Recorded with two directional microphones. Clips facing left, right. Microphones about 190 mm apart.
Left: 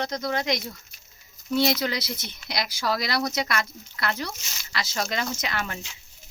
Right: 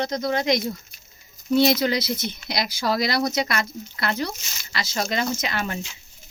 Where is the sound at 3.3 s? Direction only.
5° left (ahead or behind).